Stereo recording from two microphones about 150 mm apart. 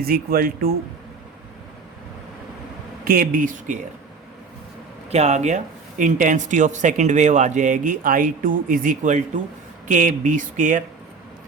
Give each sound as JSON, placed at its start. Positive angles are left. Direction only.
{"t": 0.0, "sound": "speech", "side_deg": -80}
{"t": 3.0, "sound": "speech", "side_deg": -75}
{"t": 5.1, "sound": "speech", "side_deg": -50}